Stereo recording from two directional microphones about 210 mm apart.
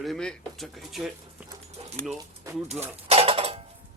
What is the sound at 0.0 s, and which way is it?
Speech, centre (ahead or behind).